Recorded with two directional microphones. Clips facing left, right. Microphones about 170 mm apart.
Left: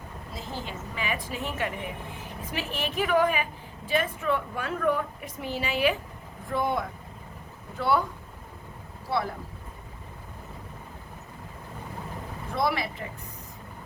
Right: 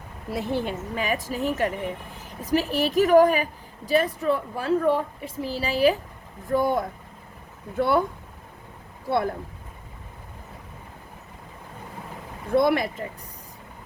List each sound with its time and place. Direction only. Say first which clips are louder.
0.3 s speech: right 11 dB; 65° right (ahead or behind)
0.9 s a woman's voice: right 4 dB; 40° right (ahead or behind)
9.0 s speech: right 5 dB; 50° right (ahead or behind)
12.5 s speech: right 7 dB; 50° right (ahead or behind)